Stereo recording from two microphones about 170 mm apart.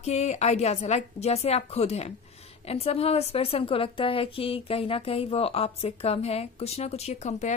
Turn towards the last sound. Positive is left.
turn(degrees=40)  # may be behind; listen again after turning